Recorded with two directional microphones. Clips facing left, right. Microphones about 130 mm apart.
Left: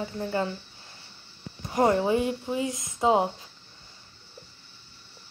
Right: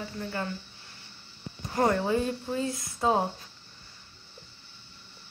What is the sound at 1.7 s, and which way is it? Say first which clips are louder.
Speech: left 3 dB; 20° left (ahead or behind).